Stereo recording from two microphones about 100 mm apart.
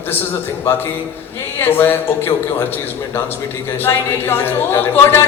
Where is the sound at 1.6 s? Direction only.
20° left (ahead or behind).